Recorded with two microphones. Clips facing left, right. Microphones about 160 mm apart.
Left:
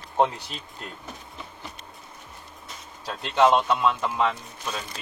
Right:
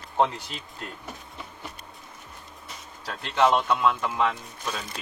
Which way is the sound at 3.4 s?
20° left (ahead or behind).